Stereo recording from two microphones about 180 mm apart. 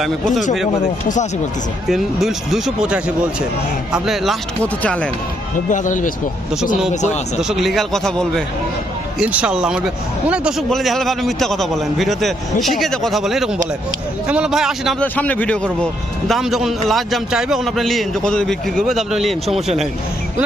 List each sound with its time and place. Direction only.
0.0 s a man's voice: centre (ahead or behind)
1.0 s speech: 45° left (ahead or behind)
1.9 s a man's voice: centre (ahead or behind)
5.7 s speech: 45° left (ahead or behind)
7.4 s a man's voice: centre (ahead or behind)
9.1 s a man's voice: 5° right (ahead or behind)
15.0 s a man's voice: 10° left (ahead or behind)